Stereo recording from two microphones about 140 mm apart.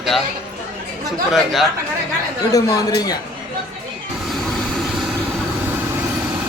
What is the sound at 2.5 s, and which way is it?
Speech, 25° left (ahead or behind).